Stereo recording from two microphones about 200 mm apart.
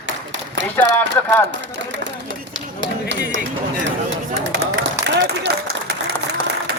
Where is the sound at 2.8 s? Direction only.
65° right (ahead or behind).